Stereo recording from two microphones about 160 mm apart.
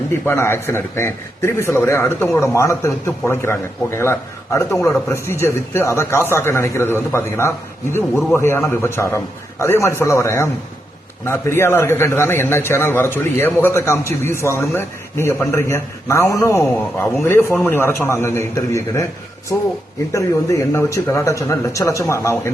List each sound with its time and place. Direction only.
0.3 s a man's voice: 15° left (ahead or behind)
20.1 s speech: 20° left (ahead or behind)